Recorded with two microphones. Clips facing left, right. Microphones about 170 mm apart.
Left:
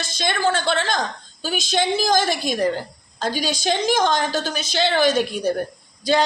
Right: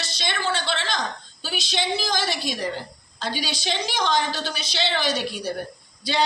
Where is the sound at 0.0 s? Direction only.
50° left (ahead or behind).